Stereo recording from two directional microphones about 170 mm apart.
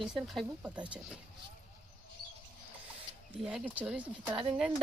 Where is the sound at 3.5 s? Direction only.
10° right (ahead or behind).